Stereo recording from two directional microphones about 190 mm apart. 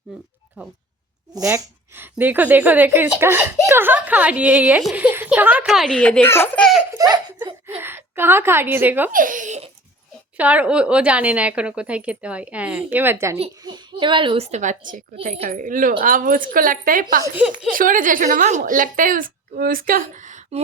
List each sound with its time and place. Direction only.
1.3 s a woman's voice: 15° right (ahead or behind); by 6.7 s 10° left (ahead or behind)
6.9 s giggle: 15° right (ahead or behind)
7.8 s a woman's voice: 10° right (ahead or behind)
9.1 s giggle: 45° right (ahead or behind)
10.3 s speech: 5° right (ahead or behind)
13.3 s a woman's voice: 30° right (ahead or behind)